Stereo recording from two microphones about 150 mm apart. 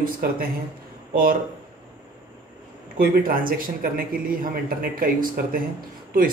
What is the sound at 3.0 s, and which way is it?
A man's voice, 70° right (ahead or behind).